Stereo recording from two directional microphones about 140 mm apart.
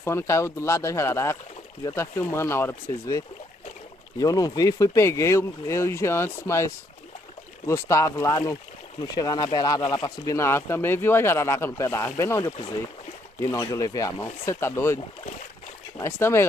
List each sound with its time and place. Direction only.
0.0 s speech: 20° left (ahead or behind)
16.0 s speech: 20° left (ahead or behind)